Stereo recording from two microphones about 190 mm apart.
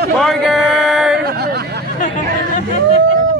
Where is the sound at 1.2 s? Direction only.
55° right (ahead or behind).